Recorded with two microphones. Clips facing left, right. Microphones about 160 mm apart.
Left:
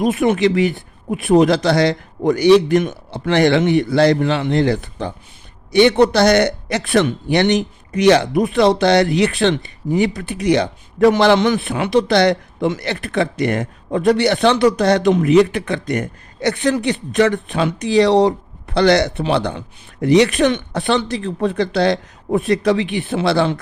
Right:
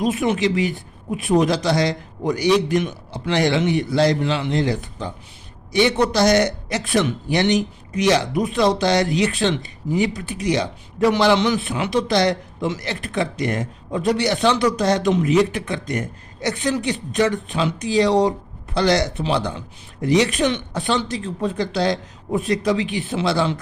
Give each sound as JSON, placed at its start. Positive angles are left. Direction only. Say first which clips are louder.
{"t": 0.0, "sound": "a man's voice", "louder": "left 4 dB", "side_deg": 55}